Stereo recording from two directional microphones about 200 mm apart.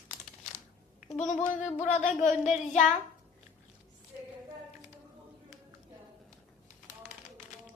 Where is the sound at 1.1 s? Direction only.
35° left (ahead or behind).